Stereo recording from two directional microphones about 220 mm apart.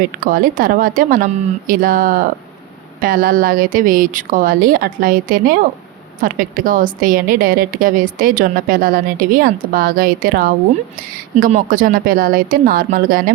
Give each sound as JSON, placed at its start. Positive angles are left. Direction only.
{"t": 0.2, "sound": "a woman's voice", "side_deg": -40}